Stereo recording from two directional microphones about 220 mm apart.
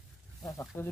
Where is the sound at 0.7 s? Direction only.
10° left (ahead or behind).